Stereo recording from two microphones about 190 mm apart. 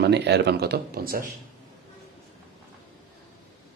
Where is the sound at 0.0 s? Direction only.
60° right (ahead or behind).